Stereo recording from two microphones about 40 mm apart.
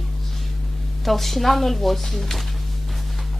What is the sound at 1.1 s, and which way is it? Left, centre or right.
Speech, centre.